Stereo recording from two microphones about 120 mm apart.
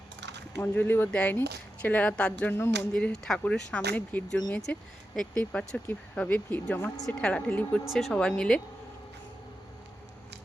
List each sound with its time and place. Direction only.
0.5 s speech: 15° left (ahead or behind)
2.9 s speech: 5° left (ahead or behind)